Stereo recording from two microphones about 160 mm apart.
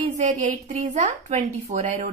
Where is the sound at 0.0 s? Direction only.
45° right (ahead or behind).